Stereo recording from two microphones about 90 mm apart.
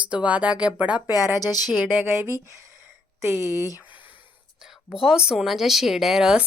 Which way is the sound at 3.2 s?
30° right (ahead or behind).